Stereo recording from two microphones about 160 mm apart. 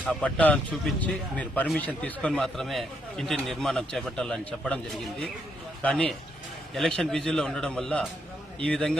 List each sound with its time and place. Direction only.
0.0 s speech: 5° left (ahead or behind)